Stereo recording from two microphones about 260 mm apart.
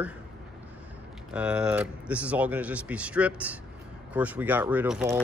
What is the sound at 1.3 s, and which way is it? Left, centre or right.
Speech, centre.